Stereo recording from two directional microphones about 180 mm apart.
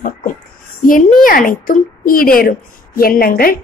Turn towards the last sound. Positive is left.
turn(degrees=55)  # may be behind; listen again after turning